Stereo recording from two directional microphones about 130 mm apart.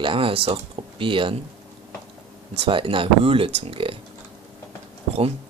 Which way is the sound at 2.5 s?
45° right (ahead or behind).